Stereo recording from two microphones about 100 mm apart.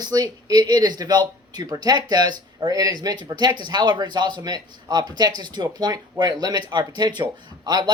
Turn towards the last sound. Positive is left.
turn(degrees=-45)  # may be behind; listen again after turning